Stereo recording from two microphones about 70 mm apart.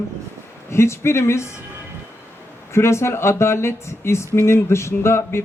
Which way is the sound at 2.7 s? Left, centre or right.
Left.